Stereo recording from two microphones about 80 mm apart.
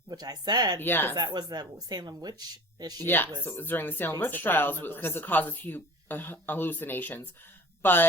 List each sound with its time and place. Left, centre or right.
0.1 s a woman's voice: right
0.8 s speech: left
1.1 s a woman's voice: right
3.0 s speech: left